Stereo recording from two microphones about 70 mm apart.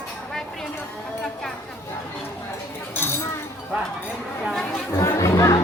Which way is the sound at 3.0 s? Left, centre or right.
Left.